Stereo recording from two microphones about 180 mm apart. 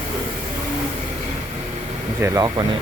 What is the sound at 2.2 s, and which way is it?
Speech, 20° right (ahead or behind).